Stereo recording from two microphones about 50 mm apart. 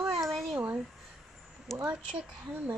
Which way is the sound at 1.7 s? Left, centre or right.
Centre.